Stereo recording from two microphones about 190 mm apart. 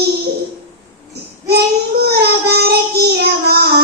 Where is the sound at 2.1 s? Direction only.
55° right (ahead or behind).